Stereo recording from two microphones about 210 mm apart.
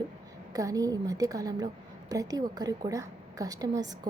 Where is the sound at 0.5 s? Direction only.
15° right (ahead or behind).